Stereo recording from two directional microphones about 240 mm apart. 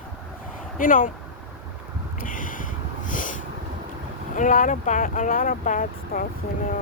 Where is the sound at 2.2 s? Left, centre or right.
Left.